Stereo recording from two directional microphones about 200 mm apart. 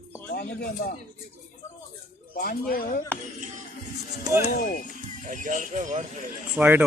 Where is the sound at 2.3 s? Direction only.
45° left (ahead or behind).